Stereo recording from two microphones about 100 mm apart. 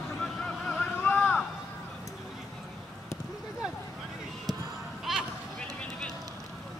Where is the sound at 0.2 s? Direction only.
10° left (ahead or behind).